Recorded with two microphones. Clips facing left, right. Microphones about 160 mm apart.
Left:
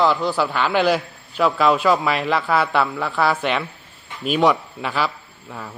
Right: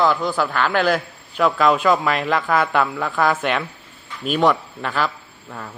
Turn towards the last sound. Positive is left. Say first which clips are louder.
# even
turn(degrees=0)  # may be behind; listen again after turning